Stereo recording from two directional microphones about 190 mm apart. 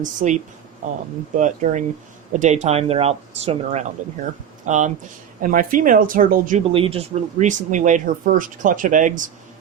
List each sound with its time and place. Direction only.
0.0 s speech: 40° right (ahead or behind)
1.4 s speech: 40° right (ahead or behind)
6.7 s speech: 30° right (ahead or behind)